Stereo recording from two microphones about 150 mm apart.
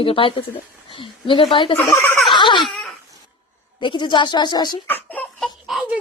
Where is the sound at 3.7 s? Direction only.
30° left (ahead or behind).